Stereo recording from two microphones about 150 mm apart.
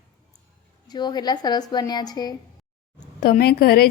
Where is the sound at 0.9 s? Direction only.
30° left (ahead or behind).